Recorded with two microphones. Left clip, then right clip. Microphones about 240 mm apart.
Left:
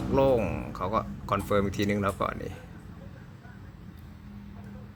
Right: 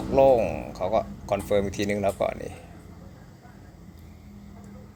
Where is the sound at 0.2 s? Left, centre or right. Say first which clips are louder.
Right 6 dB; centre.